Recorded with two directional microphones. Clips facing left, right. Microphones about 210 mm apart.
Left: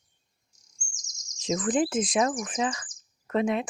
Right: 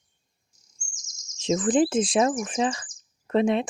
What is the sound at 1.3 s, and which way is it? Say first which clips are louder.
Speech: right 4 dB; 25° right (ahead or behind).